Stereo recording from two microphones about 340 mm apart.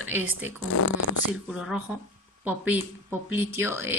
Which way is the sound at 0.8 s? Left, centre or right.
Left.